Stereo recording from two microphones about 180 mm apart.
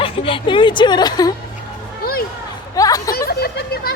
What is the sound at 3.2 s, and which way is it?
Speech, 60° left (ahead or behind).